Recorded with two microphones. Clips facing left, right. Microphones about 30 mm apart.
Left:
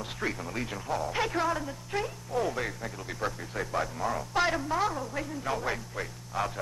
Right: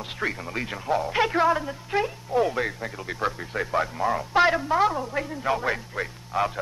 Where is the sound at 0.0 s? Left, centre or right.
Right.